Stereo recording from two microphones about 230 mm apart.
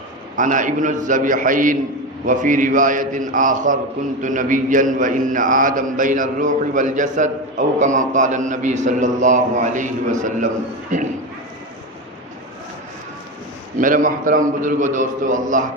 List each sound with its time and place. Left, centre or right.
0.3 s mantra: right
13.7 s mantra: right